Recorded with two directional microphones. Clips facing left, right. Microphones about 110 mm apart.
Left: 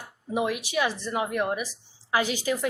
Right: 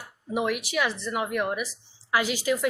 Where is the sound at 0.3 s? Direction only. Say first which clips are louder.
Even; 25° left (ahead or behind).